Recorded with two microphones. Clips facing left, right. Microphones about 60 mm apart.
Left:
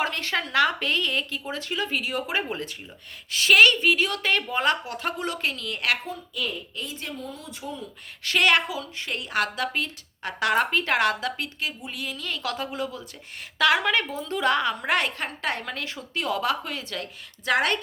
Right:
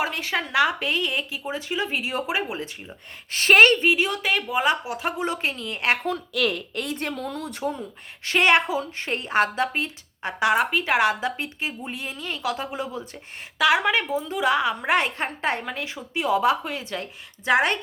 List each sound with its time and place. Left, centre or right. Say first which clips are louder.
0.0 s speech: right 1 dB; centre
2.3 s speech: right 1 dB; centre
3.3 s a woman's voice: right 2 dB; right
3.8 s a woman's voice: right 1 dB; centre
4.3 s a woman's voice: right 1 dB; centre; by 6.0 s right
6.1 s a woman's voice: right 7 dB; right
8.2 s a woman's voice: right 2 dB; right
13.6 s speech: right 1 dB; centre
15.6 s a woman's voice: right 2 dB; centre